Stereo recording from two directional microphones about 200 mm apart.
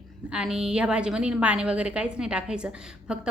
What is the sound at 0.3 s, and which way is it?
A woman's voice, 5° right (ahead or behind).